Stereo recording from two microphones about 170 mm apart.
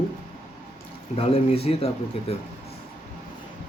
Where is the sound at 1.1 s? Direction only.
35° left (ahead or behind).